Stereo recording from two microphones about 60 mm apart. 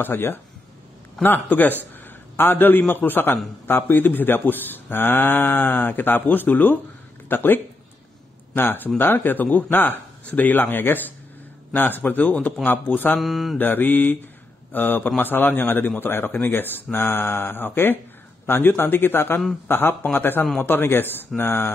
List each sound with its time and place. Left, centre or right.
0.0 s a man's voice: left
13.1 s mantra: centre
13.6 s speech: left